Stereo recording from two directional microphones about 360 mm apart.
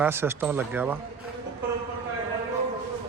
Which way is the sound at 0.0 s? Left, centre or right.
Centre.